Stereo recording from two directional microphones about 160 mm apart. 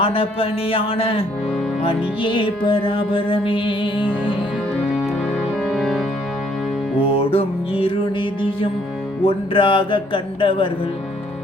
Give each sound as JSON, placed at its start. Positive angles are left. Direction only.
{"t": 0.0, "sound": "music", "side_deg": 35}
{"t": 5.6, "sound": "music", "side_deg": 0}
{"t": 7.0, "sound": "music", "side_deg": 35}